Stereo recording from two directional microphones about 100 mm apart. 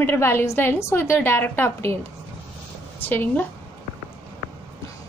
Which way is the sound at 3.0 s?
20° left (ahead or behind).